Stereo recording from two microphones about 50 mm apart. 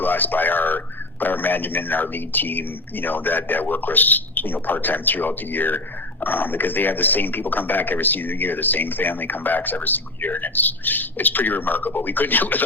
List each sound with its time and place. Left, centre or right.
0.0 s speech: left